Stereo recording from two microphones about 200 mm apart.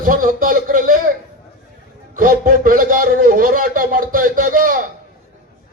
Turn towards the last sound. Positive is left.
turn(degrees=-45)  # may be behind; listen again after turning